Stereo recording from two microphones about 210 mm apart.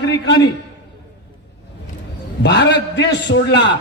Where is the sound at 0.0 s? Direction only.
55° left (ahead or behind).